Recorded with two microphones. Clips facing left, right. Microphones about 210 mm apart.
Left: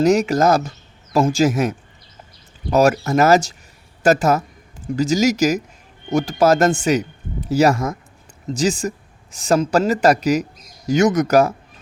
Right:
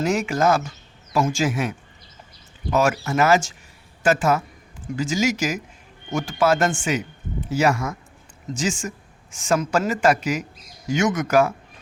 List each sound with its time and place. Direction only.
0.0 s speech: 40° left (ahead or behind)